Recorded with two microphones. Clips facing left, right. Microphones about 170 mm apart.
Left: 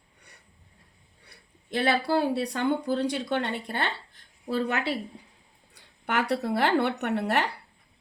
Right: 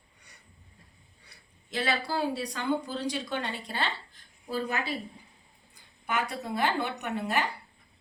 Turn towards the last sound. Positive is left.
turn(degrees=70)  # may be behind; listen again after turning